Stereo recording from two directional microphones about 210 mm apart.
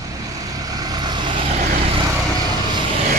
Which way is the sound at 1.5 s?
35° right (ahead or behind).